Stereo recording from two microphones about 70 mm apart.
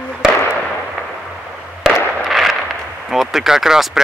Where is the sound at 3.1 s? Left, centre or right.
Centre.